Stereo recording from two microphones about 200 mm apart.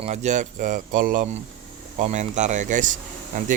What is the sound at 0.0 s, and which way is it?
Speech, 35° right (ahead or behind).